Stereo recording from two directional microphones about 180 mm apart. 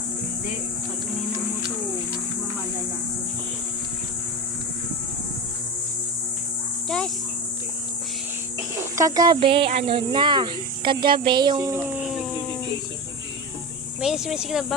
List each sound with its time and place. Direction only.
6.8 s cricket: 5° left (ahead or behind)
9.0 s speech: 20° right (ahead or behind)
12.0 s a sound: centre (ahead or behind)
14.0 s speech: centre (ahead or behind)